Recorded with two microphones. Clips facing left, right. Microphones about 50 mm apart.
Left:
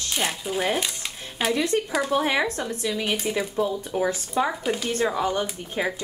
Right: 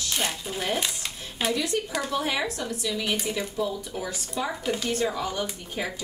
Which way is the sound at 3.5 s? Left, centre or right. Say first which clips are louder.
Left 4 dB; left.